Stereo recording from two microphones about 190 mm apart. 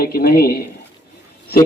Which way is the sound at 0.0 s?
50° left (ahead or behind).